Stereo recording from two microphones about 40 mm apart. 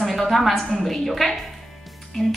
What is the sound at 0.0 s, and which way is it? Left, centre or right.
A woman's voice, centre.